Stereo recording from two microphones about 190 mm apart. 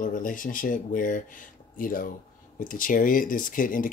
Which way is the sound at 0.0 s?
45° left (ahead or behind).